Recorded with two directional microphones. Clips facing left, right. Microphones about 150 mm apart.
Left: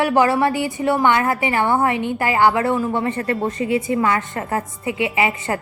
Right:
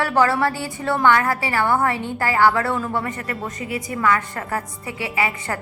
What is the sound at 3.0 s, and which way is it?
A woman's voice, 30° left (ahead or behind).